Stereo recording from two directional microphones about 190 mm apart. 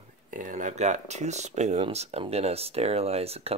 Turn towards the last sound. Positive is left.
turn(degrees=-30)  # may be behind; listen again after turning